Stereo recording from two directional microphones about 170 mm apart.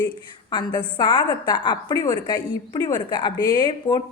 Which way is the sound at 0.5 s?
25° left (ahead or behind).